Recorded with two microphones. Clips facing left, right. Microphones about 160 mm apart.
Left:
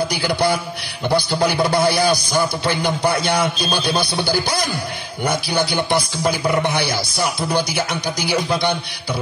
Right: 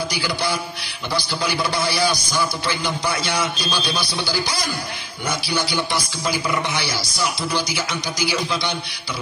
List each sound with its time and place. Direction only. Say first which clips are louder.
0.2 s a man's voice: left 6 dB; 55° left (ahead or behind)
6.2 s a sound: left 3 dB; 40° left (ahead or behind)
6.6 s music: left 5 dB; 55° left (ahead or behind)
7.9 s a man's voice: left 3 dB; 50° left (ahead or behind)